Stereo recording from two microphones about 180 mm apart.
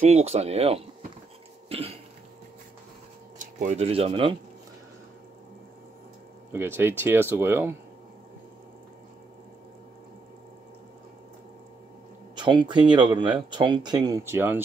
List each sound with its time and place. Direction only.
0.0 s speech: 35° right (ahead or behind)
1.7 s throat clearing: 35° right (ahead or behind)
3.3 s speech: 40° right (ahead or behind)
6.5 s speech: 15° right (ahead or behind)
12.4 s speech: 25° right (ahead or behind)